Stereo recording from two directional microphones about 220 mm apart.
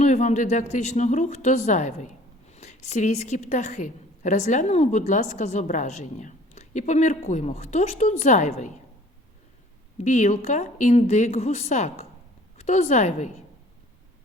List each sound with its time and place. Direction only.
0.0 s a woman's voice: 30° left (ahead or behind)
10.0 s speech: 30° left (ahead or behind)